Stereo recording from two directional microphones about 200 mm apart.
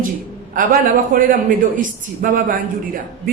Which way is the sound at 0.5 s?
45° right (ahead or behind).